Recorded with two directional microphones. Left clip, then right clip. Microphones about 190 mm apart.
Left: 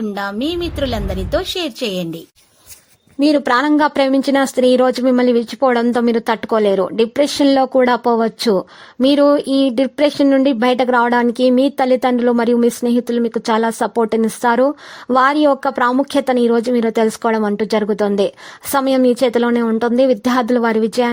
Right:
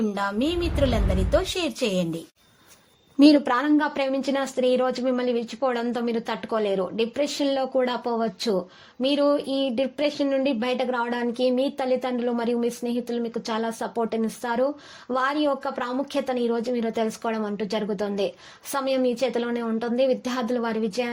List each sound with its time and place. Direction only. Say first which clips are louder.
0.1 s a woman's voice: left 5 dB; 30° left (ahead or behind)
3.2 s a woman's voice: left 2 dB; 10° left (ahead or behind)
3.4 s a woman's voice: left 9 dB; 30° left (ahead or behind)
3.8 s speech: left 10 dB; 40° left (ahead or behind)